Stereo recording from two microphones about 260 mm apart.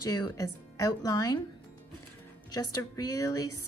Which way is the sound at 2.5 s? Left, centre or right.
Centre.